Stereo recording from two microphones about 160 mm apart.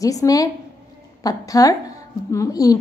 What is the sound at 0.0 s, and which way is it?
A woman's voice, 20° left (ahead or behind).